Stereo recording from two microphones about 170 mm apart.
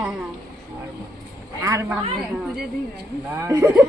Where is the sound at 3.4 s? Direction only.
15° right (ahead or behind).